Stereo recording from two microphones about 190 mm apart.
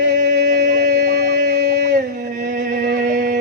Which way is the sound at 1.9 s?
40° right (ahead or behind).